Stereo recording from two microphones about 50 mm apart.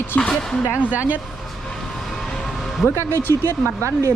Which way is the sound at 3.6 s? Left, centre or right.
Right.